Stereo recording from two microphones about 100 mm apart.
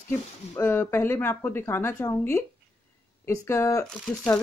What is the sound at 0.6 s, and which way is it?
Speech, 20° left (ahead or behind).